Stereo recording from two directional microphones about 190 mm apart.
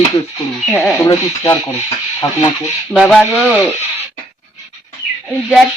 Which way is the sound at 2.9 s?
Centre (ahead or behind).